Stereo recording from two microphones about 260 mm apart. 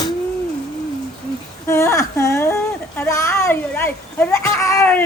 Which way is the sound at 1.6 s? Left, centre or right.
Centre.